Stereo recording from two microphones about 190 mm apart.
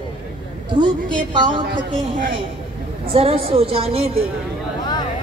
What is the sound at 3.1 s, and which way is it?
A woman's voice, 30° right (ahead or behind).